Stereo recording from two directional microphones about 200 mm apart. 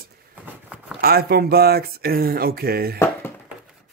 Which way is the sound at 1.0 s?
50° right (ahead or behind).